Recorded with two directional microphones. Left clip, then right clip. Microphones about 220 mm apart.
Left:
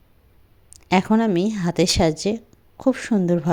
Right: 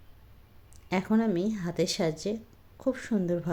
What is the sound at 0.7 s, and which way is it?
Speech, 40° left (ahead or behind).